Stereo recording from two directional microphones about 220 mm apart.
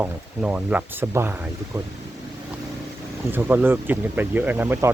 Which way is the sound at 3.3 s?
10° right (ahead or behind).